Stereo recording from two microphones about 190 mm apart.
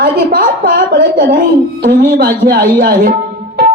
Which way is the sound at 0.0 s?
50° right (ahead or behind).